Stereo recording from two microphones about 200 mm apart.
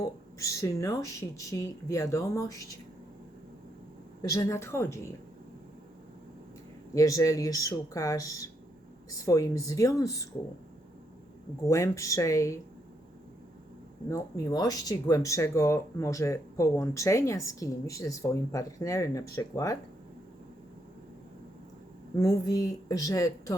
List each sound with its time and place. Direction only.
0.0 s speech: 15° left (ahead or behind)
4.2 s speech: 15° left (ahead or behind)
6.9 s speech: 15° left (ahead or behind)
11.6 s speech: 15° left (ahead or behind)
14.1 s speech: 20° left (ahead or behind)
22.1 s speech: 15° left (ahead or behind)